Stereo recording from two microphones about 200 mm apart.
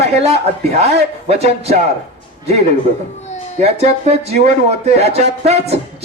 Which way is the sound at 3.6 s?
30° right (ahead or behind).